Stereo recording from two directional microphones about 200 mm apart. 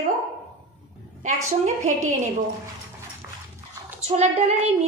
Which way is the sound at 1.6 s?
35° right (ahead or behind).